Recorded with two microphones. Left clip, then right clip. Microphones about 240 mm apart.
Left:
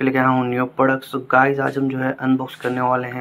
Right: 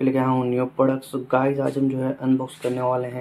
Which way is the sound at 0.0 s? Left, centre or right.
Centre.